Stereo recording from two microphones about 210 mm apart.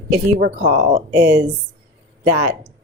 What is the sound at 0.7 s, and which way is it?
Speech, 45° right (ahead or behind).